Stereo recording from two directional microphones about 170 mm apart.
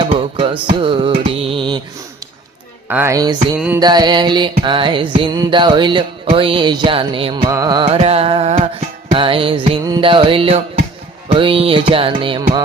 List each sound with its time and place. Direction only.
0.0 s music: 30° right (ahead or behind)
2.9 s music: 15° right (ahead or behind)
7.9 s music: 35° right (ahead or behind)